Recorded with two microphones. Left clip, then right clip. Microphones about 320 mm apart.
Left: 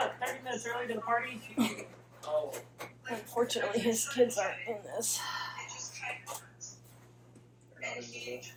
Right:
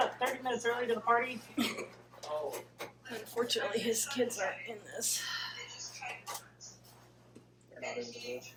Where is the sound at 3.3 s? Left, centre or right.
Centre.